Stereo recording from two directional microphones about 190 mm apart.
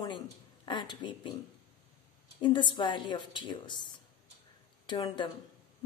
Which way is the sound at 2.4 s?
25° left (ahead or behind).